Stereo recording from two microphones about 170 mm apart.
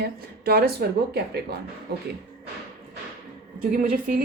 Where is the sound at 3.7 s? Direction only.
55° right (ahead or behind).